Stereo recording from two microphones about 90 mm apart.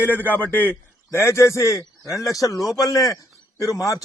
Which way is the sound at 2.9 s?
40° left (ahead or behind).